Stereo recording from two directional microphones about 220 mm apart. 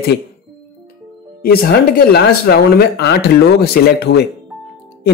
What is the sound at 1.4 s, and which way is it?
Speech, 45° left (ahead or behind).